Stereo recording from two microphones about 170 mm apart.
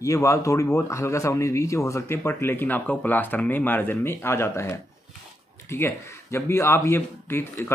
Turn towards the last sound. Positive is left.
turn(degrees=15)  # may be behind; listen again after turning